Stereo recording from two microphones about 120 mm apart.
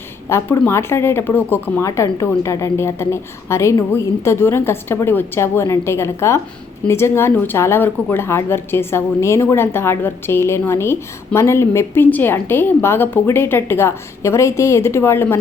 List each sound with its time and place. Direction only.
0.3 s speech: 20° left (ahead or behind)